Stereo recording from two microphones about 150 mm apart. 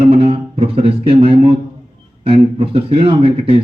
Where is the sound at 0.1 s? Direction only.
40° right (ahead or behind).